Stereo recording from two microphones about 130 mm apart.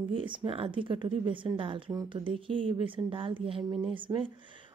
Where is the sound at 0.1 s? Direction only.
40° right (ahead or behind).